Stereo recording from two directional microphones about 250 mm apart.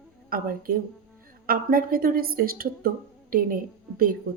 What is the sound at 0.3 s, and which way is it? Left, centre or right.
A woman's voice, right.